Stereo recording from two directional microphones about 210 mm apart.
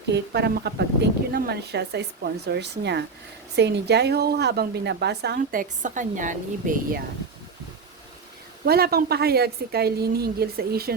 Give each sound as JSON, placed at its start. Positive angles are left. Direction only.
{"t": 0.1, "sound": "a woman's voice", "side_deg": -50}
{"t": 8.6, "sound": "a woman's voice", "side_deg": -45}